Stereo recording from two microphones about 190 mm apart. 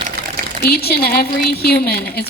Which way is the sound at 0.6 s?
55° left (ahead or behind).